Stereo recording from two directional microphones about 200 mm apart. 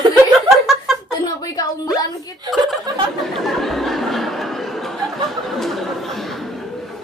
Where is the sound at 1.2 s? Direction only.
20° left (ahead or behind).